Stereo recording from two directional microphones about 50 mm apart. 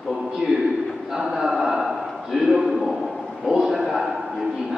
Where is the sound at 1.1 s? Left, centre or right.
Centre.